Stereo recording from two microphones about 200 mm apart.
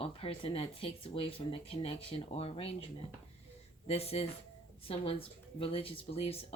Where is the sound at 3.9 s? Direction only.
30° left (ahead or behind).